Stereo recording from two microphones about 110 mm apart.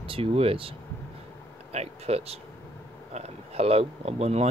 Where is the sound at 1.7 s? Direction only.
75° right (ahead or behind).